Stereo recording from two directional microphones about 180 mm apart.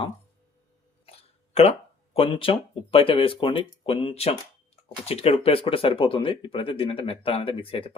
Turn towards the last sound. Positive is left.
turn(degrees=30)  # may be behind; listen again after turning